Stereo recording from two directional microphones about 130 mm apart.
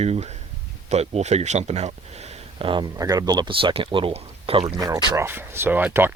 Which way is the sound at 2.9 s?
25° right (ahead or behind).